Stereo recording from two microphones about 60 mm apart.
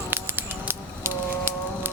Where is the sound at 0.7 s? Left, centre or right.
Right.